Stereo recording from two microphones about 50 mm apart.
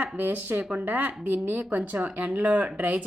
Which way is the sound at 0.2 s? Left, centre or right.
Right.